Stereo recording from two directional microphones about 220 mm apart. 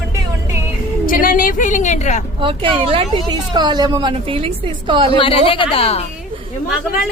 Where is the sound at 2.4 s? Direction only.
25° right (ahead or behind).